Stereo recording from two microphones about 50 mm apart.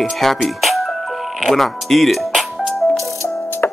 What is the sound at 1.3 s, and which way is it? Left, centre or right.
Music, centre.